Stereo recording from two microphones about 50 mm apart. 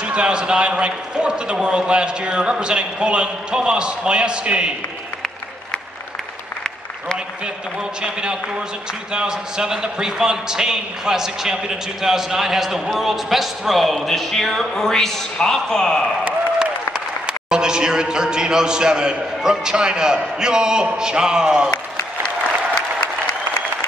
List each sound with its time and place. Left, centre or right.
0.0 s a man's voice: right
8.0 s a man's voice: centre
17.3 s a man's voice: centre